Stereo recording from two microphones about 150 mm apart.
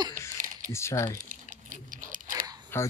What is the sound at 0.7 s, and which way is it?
Speech, 20° left (ahead or behind).